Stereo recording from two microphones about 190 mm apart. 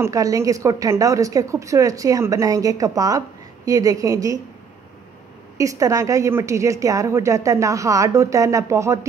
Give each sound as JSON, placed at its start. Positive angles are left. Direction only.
{"t": 0.0, "sound": "a woman's voice", "side_deg": -15}
{"t": 5.6, "sound": "a woman's voice", "side_deg": -15}